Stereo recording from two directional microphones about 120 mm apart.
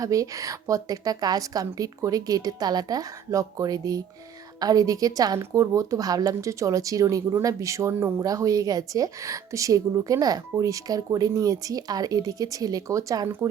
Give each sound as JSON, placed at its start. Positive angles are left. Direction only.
{"t": 0.0, "sound": "a woman's voice", "side_deg": -30}